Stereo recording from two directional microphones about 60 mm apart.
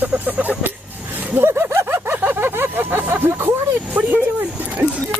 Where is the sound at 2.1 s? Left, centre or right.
Right.